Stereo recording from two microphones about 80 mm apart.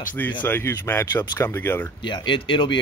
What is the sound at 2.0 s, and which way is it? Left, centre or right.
Speech, left.